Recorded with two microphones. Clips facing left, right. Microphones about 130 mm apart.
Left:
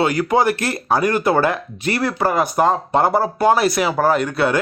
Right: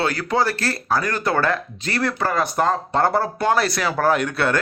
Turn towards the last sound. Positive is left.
turn(degrees=10)  # may be behind; listen again after turning